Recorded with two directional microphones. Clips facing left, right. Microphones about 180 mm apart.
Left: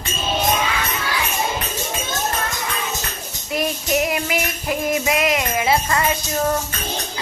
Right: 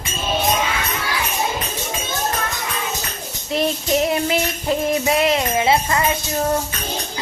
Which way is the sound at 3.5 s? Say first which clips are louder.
Right 2 dB; 30° right (ahead or behind).